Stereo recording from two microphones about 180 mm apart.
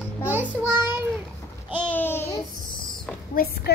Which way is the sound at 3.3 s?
60° left (ahead or behind).